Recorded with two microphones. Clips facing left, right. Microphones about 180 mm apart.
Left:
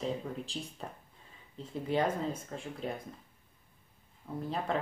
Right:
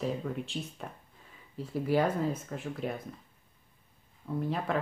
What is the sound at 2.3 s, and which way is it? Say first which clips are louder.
Speech: right 3 dB; 30° left (ahead or behind).